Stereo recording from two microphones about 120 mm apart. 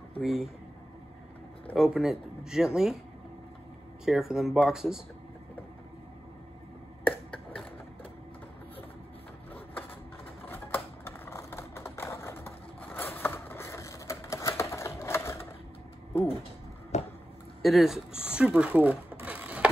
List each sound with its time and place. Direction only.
0.2 s speech: 5° right (ahead or behind)
1.8 s speech: 5° right (ahead or behind)
4.0 s speech: 5° right (ahead or behind)
7.1 s a sound: 15° left (ahead or behind)
10.4 s typewriter: 20° left (ahead or behind)
16.9 s a sound: 70° left (ahead or behind)
17.6 s sewing machine: centre (ahead or behind)